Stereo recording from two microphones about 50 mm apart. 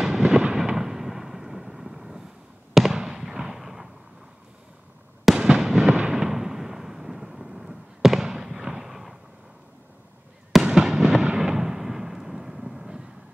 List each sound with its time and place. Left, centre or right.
0.0 s fireworks: centre
5.2 s fireworks: centre
6.1 s artillery fire: centre
10.6 s fireworks: centre
11.3 s artillery fire: centre